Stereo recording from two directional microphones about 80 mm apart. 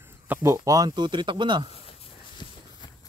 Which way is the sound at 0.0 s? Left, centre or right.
Right.